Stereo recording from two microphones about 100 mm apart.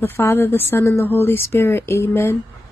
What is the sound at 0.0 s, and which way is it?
Speech, 20° left (ahead or behind).